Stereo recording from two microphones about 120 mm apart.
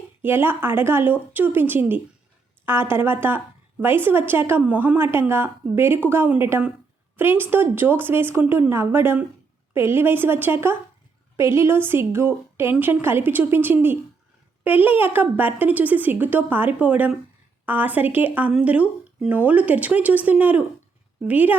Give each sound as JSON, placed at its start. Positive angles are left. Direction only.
{"t": 0.2, "sound": "a woman's voice", "side_deg": -20}